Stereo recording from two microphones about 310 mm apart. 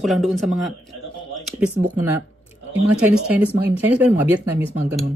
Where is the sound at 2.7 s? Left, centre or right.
Centre.